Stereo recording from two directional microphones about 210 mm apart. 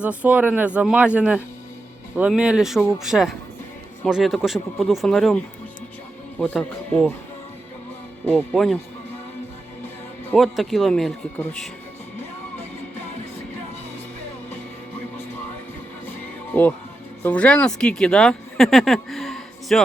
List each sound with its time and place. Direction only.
0.0 s speech: 5° right (ahead or behind)
6.4 s speech: 5° left (ahead or behind)
8.2 s speech: 10° left (ahead or behind)
10.3 s speech: centre (ahead or behind)
16.5 s speech: 5° left (ahead or behind)